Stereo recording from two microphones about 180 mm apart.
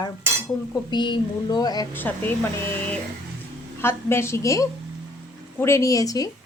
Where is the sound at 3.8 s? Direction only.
15° left (ahead or behind).